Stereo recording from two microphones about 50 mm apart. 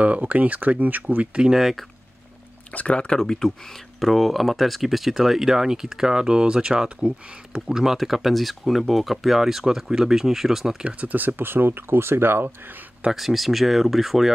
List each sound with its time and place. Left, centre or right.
0.0 s speech: right
1.4 s speech: centre
2.7 s speech: left
3.2 s speech: centre; by 7.2 s right
7.5 s speech: centre
10.8 s speech: right
13.1 s speech: centre